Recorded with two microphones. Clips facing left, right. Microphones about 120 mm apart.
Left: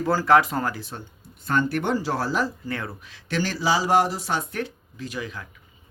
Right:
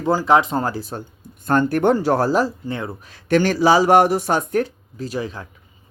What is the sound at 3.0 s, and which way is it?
Speech, 45° right (ahead or behind).